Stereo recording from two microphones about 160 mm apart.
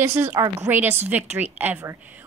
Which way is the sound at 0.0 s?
15° right (ahead or behind).